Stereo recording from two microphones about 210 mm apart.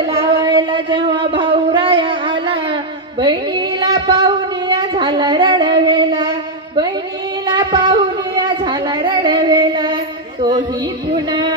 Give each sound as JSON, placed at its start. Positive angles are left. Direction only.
{"t": 0.0, "sound": "music", "side_deg": -20}
{"t": 7.4, "sound": "child singing", "side_deg": -20}
{"t": 11.1, "sound": "music", "side_deg": -20}